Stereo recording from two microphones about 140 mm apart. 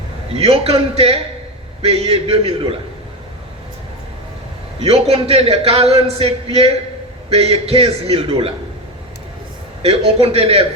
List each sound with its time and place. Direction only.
0.3 s a man's voice: 45° right (ahead or behind)
4.8 s a man's voice: 45° right (ahead or behind)
9.8 s a man's voice: 45° right (ahead or behind)